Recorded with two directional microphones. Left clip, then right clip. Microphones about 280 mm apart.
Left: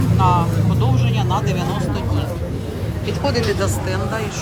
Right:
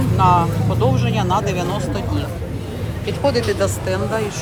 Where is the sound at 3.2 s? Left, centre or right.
Centre.